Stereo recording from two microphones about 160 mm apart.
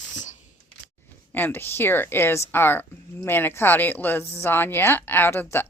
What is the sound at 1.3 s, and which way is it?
A woman's voice, 10° left (ahead or behind).